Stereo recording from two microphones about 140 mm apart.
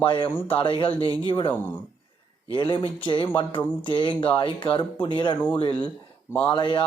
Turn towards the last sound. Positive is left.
turn(degrees=35)  # may be behind; listen again after turning